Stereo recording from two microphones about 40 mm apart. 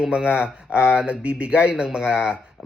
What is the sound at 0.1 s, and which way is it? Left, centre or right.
Speech, right.